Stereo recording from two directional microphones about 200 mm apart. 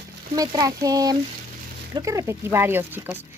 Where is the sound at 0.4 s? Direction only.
15° right (ahead or behind).